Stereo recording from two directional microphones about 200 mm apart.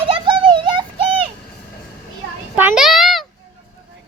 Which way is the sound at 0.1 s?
25° right (ahead or behind).